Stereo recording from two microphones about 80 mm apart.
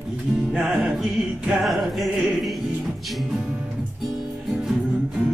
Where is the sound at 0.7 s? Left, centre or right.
Centre.